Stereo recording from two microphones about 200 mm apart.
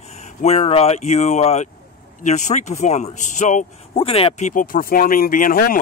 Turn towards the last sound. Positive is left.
turn(degrees=45)  # may be behind; listen again after turning